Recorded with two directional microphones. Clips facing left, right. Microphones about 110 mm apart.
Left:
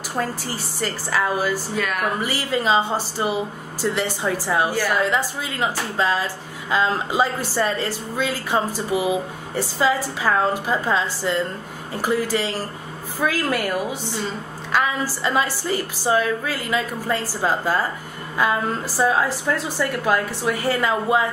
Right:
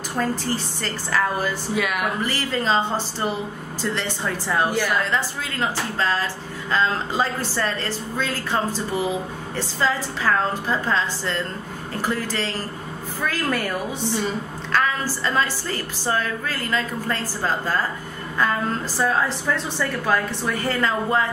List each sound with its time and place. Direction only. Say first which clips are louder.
0.7 s a woman's voice: left 5 dB; 10° left (ahead or behind)
1.8 s speech: right 3 dB; 10° right (ahead or behind)
2.2 s a woman's voice: left 2 dB; 10° left (ahead or behind)